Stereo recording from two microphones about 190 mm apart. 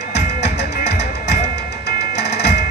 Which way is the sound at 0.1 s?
60° left (ahead or behind).